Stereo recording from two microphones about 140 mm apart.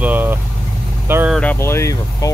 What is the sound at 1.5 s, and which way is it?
Speech, 20° left (ahead or behind).